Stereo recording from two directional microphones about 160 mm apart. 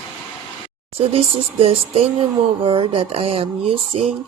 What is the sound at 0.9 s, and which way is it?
Speech, 40° right (ahead or behind).